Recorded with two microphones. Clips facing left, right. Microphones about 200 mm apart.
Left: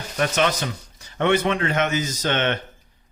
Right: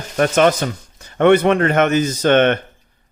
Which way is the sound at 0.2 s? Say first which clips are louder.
Right 7 dB; 50° right (ahead or behind).